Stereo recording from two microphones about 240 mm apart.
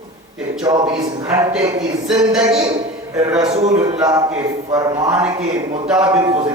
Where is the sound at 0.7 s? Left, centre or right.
Centre.